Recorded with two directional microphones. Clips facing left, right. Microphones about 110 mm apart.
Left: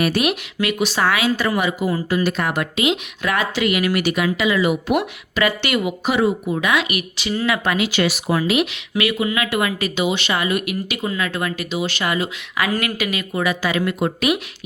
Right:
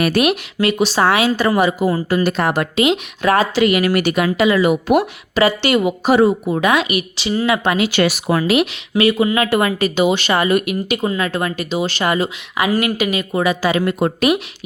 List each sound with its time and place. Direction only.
0.0 s speech: 55° right (ahead or behind)
0.6 s speech: 30° right (ahead or behind)
5.4 s a woman's voice: 30° right (ahead or behind)
7.9 s speech: 55° right (ahead or behind)
9.0 s speech: 35° right (ahead or behind)
10.7 s speech: 30° right (ahead or behind)
12.5 s a woman's voice: 20° right (ahead or behind); by 14.3 s 40° right (ahead or behind)